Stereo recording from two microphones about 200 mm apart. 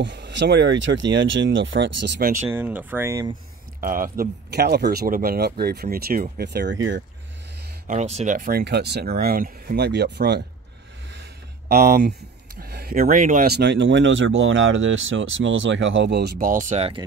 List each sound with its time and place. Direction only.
0.0 s speech: 60° right (ahead or behind)
2.4 s speech: 10° right (ahead or behind)
3.8 s speech: 45° right (ahead or behind); by 7.0 s 65° right (ahead or behind)
7.9 s speech: 35° right (ahead or behind); by 10.4 s 55° right (ahead or behind)
11.7 s speech: 50° right (ahead or behind); by 17.0 s 30° right (ahead or behind)